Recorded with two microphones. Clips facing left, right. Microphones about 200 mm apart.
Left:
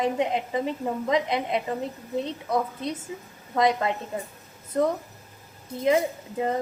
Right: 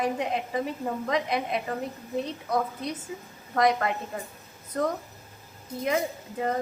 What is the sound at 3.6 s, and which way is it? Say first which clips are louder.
Speech: left 1 dB; 25° left (ahead or behind).